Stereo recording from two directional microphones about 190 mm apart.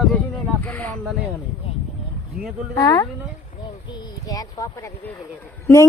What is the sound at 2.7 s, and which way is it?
Speech, 20° left (ahead or behind).